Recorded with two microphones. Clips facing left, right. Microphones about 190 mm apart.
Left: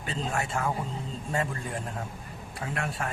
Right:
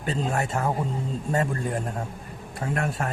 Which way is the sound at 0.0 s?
40° right (ahead or behind).